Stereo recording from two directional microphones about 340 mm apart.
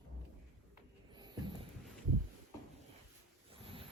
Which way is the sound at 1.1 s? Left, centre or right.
Centre.